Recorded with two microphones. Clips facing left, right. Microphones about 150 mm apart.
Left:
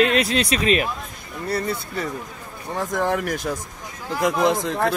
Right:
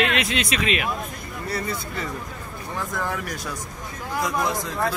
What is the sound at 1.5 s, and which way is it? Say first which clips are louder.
Speech: left 4 dB; 60° left (ahead or behind).